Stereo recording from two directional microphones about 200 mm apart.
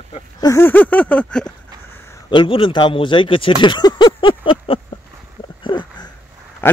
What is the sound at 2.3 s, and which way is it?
Speech, 25° left (ahead or behind).